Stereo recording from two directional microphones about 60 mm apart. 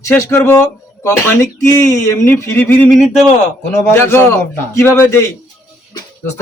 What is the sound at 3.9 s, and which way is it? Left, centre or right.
A man's voice, left.